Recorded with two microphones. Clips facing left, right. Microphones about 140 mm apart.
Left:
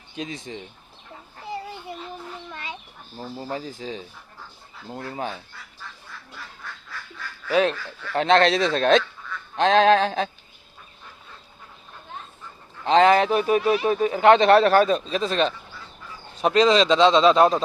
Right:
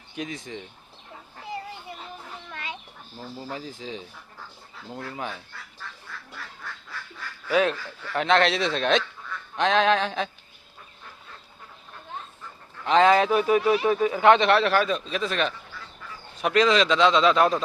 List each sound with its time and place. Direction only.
0.2 s speech: 30° left (ahead or behind)
3.2 s speech: 20° left (ahead or behind)
3.5 s speech: 40° left (ahead or behind)
7.5 s speech: 25° left (ahead or behind)
12.8 s speech: 35° left (ahead or behind)